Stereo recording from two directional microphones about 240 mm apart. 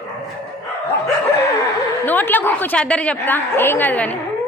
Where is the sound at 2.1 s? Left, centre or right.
Centre.